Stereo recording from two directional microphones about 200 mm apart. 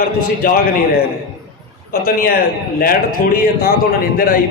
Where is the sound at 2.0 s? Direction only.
50° left (ahead or behind).